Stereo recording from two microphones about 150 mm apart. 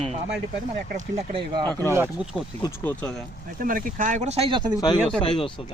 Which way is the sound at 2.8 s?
10° left (ahead or behind).